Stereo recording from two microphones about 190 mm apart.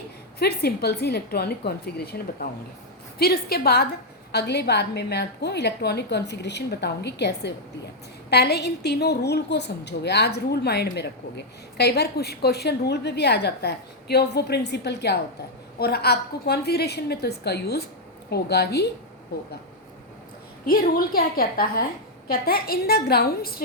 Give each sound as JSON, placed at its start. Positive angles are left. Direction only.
{"t": 0.3, "sound": "a woman's voice", "side_deg": 55}
{"t": 20.7, "sound": "a woman's voice", "side_deg": 50}